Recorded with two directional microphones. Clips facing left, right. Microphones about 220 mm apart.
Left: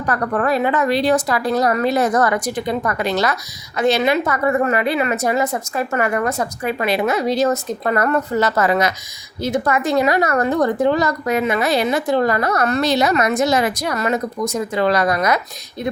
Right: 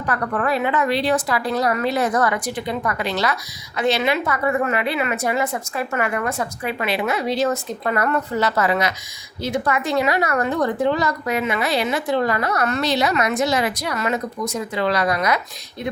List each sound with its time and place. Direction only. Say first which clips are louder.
0.0 s a woman's voice: left 3 dB; 40° left (ahead or behind)